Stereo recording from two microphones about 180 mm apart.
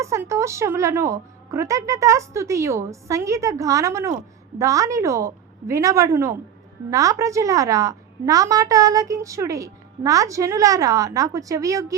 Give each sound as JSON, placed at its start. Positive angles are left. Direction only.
{"t": 0.0, "sound": "a woman's voice", "side_deg": -15}